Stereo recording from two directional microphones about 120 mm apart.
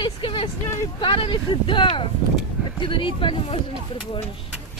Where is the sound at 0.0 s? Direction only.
45° left (ahead or behind).